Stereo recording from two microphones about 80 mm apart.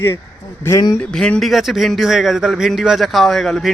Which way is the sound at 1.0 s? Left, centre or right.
Centre.